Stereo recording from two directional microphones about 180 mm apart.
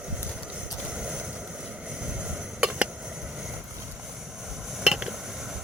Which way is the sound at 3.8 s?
10° right (ahead or behind).